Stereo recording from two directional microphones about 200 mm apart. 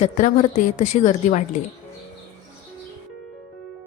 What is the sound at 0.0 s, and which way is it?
A woman's voice, 35° left (ahead or behind).